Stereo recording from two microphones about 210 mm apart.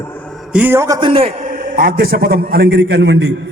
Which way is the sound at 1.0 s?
25° right (ahead or behind).